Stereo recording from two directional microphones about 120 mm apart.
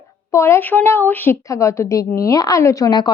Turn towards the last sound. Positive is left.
turn(degrees=35)  # may be behind; listen again after turning